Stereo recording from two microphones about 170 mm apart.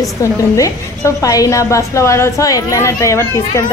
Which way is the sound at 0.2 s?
20° left (ahead or behind).